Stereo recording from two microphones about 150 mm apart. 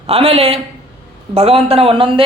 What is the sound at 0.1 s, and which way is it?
A man's voice, 40° right (ahead or behind).